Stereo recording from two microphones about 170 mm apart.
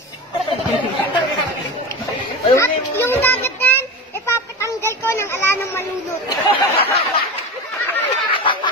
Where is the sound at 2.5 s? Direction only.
15° left (ahead or behind).